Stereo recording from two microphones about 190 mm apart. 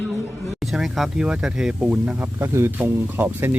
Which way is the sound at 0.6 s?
Centre (ahead or behind).